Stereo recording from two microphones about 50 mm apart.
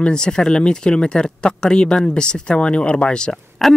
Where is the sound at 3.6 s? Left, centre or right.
Centre.